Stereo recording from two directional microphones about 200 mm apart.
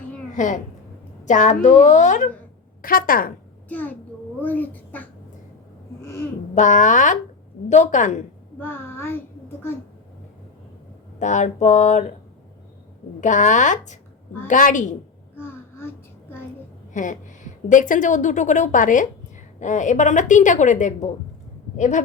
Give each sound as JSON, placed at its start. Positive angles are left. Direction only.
{"t": 1.2, "sound": "a woman's voice", "side_deg": 35}
{"t": 3.7, "sound": "a child's voice", "side_deg": 10}
{"t": 6.0, "sound": "babbling", "side_deg": 15}
{"t": 6.5, "sound": "a woman's voice", "side_deg": 40}
{"t": 8.5, "sound": "a sound", "side_deg": 10}
{"t": 11.2, "sound": "a woman's voice", "side_deg": 40}
{"t": 13.2, "sound": "a woman's voice", "side_deg": 40}
{"t": 15.4, "sound": "a sound", "side_deg": 10}
{"t": 16.9, "sound": "a woman's voice", "side_deg": 40}